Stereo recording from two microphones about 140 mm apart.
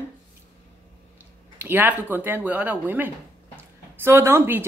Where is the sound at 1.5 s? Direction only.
15° right (ahead or behind).